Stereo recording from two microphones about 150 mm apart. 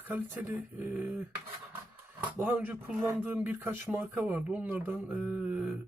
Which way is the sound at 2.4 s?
10° right (ahead or behind).